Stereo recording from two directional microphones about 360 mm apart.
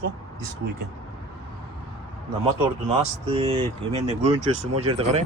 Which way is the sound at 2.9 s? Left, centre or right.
Centre.